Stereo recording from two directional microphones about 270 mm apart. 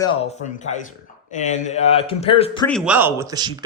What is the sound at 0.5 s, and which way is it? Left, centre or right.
A man's voice, left.